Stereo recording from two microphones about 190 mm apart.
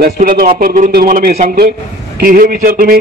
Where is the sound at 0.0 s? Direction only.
50° right (ahead or behind).